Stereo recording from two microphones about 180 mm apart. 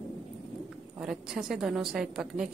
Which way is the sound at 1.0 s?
5° right (ahead or behind).